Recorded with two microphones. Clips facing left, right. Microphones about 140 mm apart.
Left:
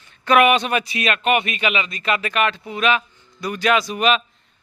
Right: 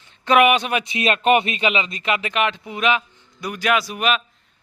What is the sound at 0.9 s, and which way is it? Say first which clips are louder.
Speech: right 3 dB; 30° right (ahead or behind).